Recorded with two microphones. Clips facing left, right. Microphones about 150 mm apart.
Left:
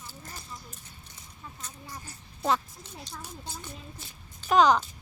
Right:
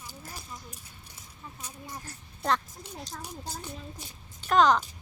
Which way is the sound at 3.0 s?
40° right (ahead or behind).